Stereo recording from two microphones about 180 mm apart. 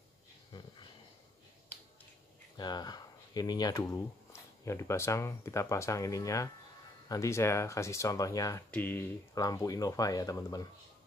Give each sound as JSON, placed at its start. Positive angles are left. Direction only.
{"t": 2.5, "sound": "speech", "side_deg": 25}